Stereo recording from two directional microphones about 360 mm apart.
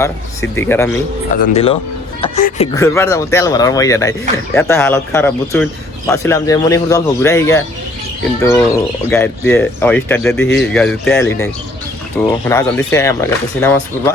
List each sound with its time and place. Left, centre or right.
0.5 s speech: centre
2.8 s speech: centre